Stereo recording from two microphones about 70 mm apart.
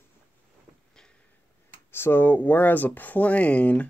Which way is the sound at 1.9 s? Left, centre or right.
Left.